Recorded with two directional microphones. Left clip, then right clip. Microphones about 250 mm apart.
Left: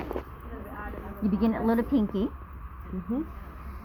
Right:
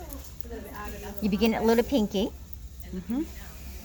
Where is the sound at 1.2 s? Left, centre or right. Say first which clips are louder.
Right 3 dB; right.